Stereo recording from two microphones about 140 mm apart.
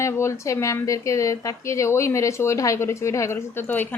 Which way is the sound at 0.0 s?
20° left (ahead or behind).